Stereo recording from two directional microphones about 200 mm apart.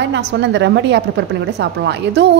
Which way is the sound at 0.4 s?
60° right (ahead or behind).